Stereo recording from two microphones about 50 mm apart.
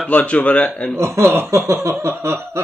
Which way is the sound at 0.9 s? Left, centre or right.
Right.